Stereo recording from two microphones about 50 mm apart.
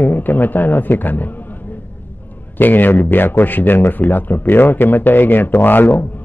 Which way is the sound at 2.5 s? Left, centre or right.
Left.